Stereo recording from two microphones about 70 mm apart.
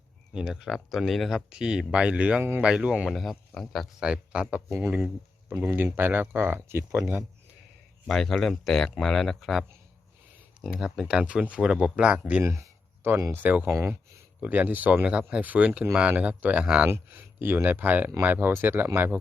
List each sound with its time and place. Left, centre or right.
0.3 s speech: centre
1.5 s speech: centre
3.1 s speech: centre
4.0 s speech: centre
5.7 s speech: right
8.0 s speech: centre
10.7 s speech: centre
12.4 s a sound: right
13.3 s speech: right
14.4 s speech: right
16.8 s speech: right